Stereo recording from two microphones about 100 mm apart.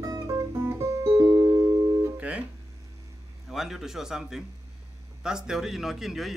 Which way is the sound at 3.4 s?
5° right (ahead or behind).